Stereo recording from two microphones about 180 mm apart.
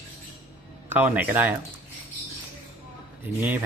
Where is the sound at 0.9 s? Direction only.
10° right (ahead or behind).